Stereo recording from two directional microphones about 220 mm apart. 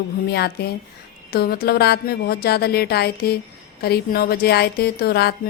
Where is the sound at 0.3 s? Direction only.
45° left (ahead or behind).